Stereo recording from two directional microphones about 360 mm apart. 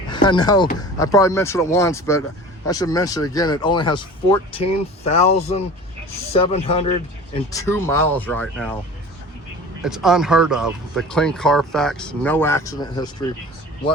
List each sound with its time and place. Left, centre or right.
0.1 s speech: centre
9.8 s speech: centre